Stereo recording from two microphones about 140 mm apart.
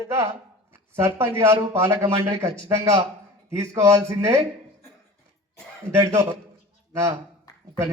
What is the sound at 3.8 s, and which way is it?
Speech, 20° right (ahead or behind).